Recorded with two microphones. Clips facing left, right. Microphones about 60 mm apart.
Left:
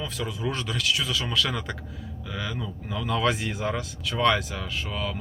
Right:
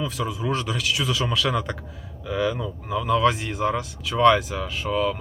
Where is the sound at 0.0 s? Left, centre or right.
Centre.